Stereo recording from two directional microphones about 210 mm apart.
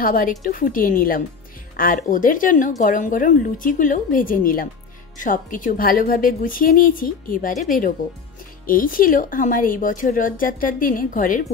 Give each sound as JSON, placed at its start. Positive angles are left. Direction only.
{"t": 0.0, "sound": "speech", "side_deg": 40}
{"t": 8.6, "sound": "speech", "side_deg": 40}